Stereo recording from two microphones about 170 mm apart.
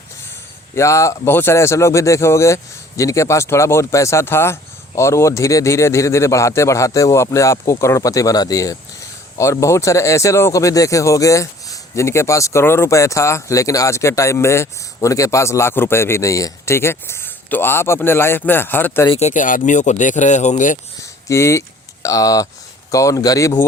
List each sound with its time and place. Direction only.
0.8 s speech: 20° left (ahead or behind)
19.1 s speech: 45° left (ahead or behind)
21.0 s speech: 15° left (ahead or behind)